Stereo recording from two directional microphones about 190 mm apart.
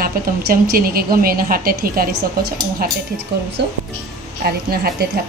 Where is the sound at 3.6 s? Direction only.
65° right (ahead or behind).